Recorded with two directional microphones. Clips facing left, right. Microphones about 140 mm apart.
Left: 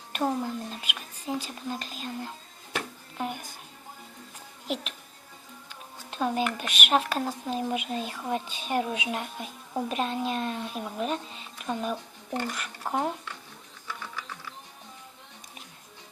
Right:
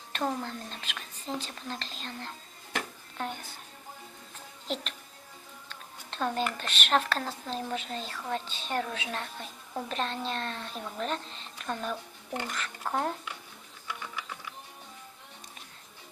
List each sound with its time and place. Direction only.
0.1 s speech: 10° left (ahead or behind)
3.2 s music: 5° left (ahead or behind)
4.7 s speech: 5° left (ahead or behind)